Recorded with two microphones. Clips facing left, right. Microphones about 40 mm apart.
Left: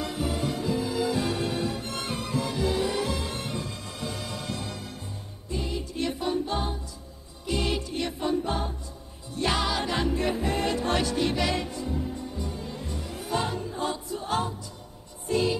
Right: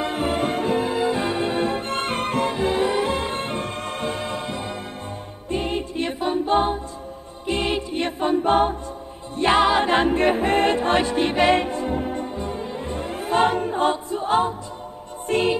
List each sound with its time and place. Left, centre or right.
0.0 s music: right
5.5 s music: right
9.4 s music: right
15.2 s music: right